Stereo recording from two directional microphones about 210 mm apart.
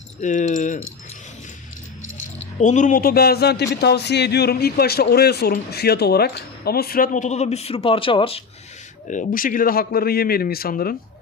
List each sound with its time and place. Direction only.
0.2 s speech: 35° left (ahead or behind)
2.6 s a man's voice: 35° left (ahead or behind)
9.0 s a man's voice: 40° left (ahead or behind)